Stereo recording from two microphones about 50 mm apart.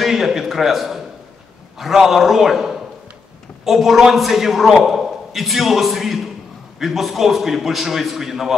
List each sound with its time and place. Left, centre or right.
0.0 s a man's voice: centre